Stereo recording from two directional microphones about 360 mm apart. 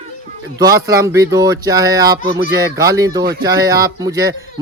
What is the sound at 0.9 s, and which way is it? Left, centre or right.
Speech, centre.